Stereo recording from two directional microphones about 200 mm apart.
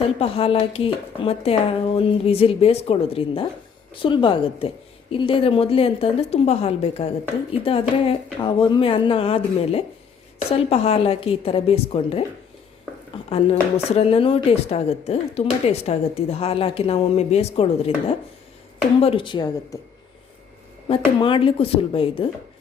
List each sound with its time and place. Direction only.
0.2 s speech: 30° left (ahead or behind)
13.3 s speech: 30° left (ahead or behind)
18.9 s speech: 30° left (ahead or behind)
20.8 s speech: 25° left (ahead or behind)